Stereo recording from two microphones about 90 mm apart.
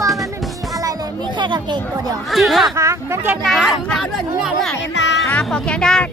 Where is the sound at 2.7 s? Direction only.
35° right (ahead or behind).